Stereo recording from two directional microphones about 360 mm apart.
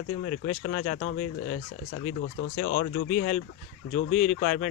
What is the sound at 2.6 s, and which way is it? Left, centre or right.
Speech, left.